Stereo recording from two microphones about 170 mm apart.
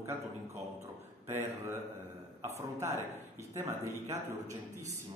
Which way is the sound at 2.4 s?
15° right (ahead or behind).